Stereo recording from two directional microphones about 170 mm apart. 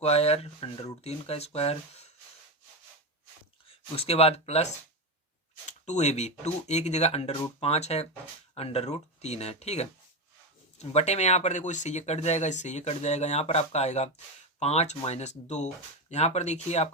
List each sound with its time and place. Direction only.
0.0 s speech: 35° left (ahead or behind)
3.7 s speech: 35° left (ahead or behind)